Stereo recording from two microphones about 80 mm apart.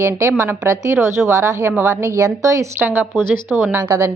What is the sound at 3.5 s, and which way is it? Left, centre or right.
Speech, centre.